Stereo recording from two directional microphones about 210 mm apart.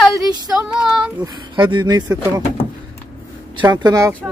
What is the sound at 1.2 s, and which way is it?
Speech, 20° right (ahead or behind).